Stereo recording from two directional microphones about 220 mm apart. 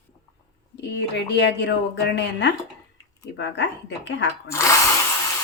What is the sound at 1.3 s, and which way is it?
Speech, 50° left (ahead or behind).